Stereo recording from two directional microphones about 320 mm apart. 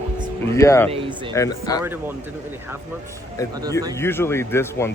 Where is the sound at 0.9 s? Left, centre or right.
Centre.